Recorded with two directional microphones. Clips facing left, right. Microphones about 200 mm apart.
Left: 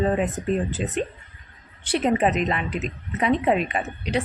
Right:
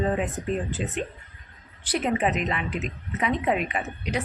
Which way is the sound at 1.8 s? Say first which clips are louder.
Left 4 dB; 30° left (ahead or behind).